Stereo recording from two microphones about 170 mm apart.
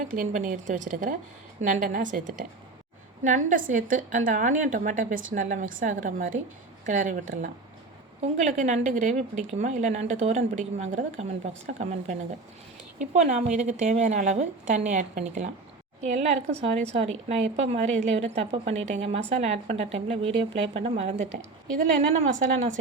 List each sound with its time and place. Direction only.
0.0 s speech: 50° right (ahead or behind)
13.1 s a woman's voice: 45° right (ahead or behind)